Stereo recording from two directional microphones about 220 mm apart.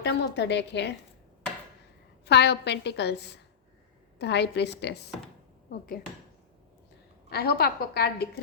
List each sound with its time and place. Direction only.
0.0 s a woman's voice: 50° left (ahead or behind)
2.2 s a woman's voice: 50° left (ahead or behind)
7.3 s a woman's voice: 45° left (ahead or behind)